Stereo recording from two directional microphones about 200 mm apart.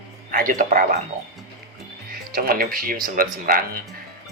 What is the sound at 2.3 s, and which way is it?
Speech, 45° right (ahead or behind).